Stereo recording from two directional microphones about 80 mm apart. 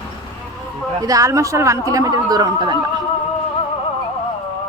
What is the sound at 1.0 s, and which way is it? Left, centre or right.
Speech, right.